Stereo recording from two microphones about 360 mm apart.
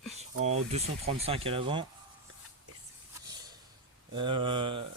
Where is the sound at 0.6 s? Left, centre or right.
Centre.